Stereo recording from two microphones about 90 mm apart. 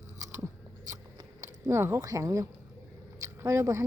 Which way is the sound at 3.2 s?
35° right (ahead or behind).